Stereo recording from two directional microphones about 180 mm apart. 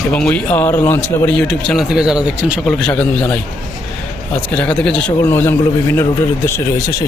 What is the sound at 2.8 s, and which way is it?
Speech, 5° left (ahead or behind).